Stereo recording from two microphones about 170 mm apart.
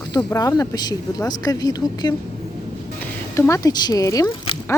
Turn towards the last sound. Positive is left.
turn(degrees=20)  # may be behind; listen again after turning